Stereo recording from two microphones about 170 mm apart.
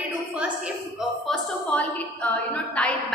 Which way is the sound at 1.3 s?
10° left (ahead or behind).